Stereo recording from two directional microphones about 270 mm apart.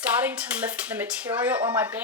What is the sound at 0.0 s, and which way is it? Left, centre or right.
Speech, centre.